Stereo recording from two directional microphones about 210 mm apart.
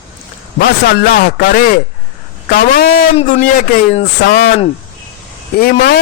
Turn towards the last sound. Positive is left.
turn(degrees=50)  # may be behind; listen again after turning